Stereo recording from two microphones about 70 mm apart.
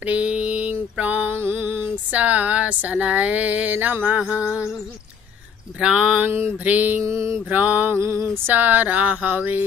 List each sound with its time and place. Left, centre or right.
0.0 s mantra: centre
1.4 s a sound: right
2.0 s speech: right
5.8 s a sound: centre
6.6 s speech: right
7.0 s mantra: right
7.4 s speech: right
8.0 s a sound: right
8.5 s speech: right